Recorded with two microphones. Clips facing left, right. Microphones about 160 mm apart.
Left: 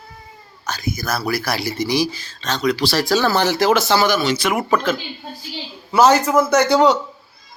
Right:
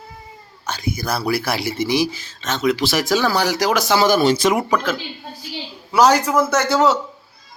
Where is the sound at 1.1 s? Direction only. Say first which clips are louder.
Right 1 dB; 25° right (ahead or behind); by 6.2 s 10° right (ahead or behind).